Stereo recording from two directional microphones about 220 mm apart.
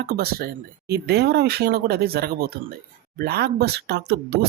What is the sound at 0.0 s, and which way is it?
Speech, 45° right (ahead or behind).